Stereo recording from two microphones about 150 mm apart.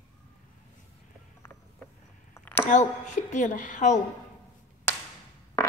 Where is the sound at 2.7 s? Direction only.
55° left (ahead or behind).